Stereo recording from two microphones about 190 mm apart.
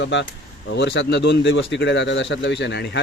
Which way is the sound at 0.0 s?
75° left (ahead or behind).